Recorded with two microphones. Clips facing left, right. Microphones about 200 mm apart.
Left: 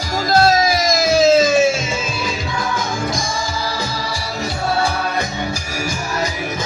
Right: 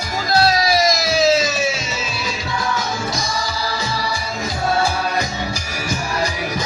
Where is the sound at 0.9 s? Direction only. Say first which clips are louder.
Left 4 dB; 50° left (ahead or behind).